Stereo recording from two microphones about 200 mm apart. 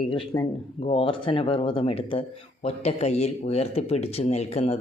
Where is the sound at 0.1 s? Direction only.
25° left (ahead or behind).